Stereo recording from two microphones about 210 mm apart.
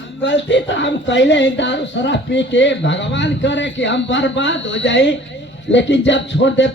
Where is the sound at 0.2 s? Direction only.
60° left (ahead or behind).